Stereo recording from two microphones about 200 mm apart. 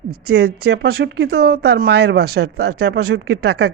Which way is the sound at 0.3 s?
50° right (ahead or behind).